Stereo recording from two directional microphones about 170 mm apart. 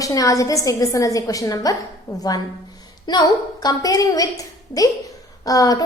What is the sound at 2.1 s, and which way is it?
A woman's voice, 35° left (ahead or behind).